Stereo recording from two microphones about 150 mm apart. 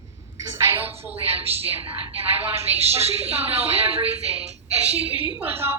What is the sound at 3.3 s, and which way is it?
Speech, 15° right (ahead or behind).